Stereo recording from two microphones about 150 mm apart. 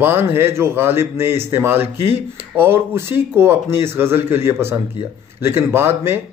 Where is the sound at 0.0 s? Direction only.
15° right (ahead or behind).